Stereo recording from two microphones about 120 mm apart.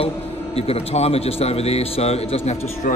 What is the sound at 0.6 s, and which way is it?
A man's voice, 55° left (ahead or behind).